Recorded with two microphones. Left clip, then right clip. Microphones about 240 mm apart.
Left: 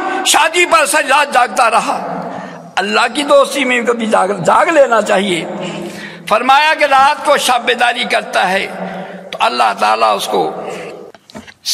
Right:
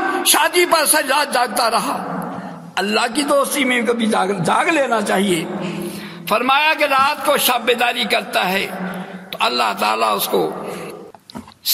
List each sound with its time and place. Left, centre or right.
0.3 s a man's voice: right